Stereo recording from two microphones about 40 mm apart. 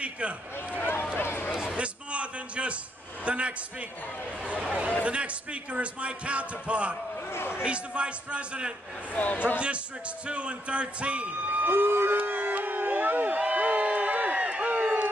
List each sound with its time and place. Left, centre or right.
0.0 s a man's voice: right
0.7 s speech: left
1.8 s a man's voice: right
5.0 s speech: right
7.2 s a sound: left
7.6 s a man's voice: right
9.1 s a man's voice: left
9.6 s speech: right
11.7 s speech: right
12.2 s a sound: right
13.5 s crowd: right